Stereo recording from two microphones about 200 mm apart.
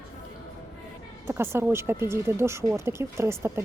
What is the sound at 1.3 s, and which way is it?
Speech, 10° right (ahead or behind).